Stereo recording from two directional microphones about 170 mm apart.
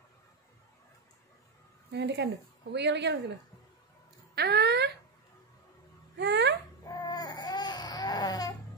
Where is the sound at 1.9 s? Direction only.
85° right.